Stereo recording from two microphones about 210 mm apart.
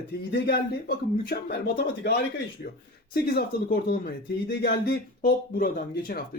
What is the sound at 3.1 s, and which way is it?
A man's voice, 45° left (ahead or behind).